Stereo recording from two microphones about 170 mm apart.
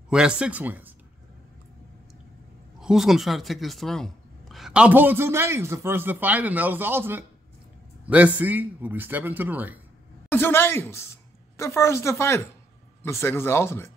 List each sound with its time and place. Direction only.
0.1 s speech: 5° right (ahead or behind)
2.8 s speech: 5° right (ahead or behind)
10.3 s a woman's voice: 15° left (ahead or behind)